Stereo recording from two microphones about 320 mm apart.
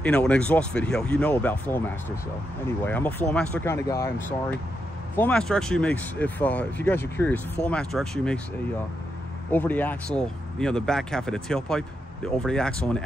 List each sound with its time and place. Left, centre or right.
0.0 s speech: centre
9.5 s speech: centre